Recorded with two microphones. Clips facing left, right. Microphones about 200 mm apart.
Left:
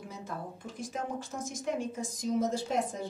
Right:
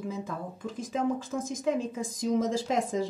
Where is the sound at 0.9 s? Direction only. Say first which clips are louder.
Right 8 dB; 90° right.